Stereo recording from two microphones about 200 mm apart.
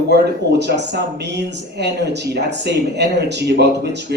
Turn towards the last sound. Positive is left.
turn(degrees=-55)  # may be behind; listen again after turning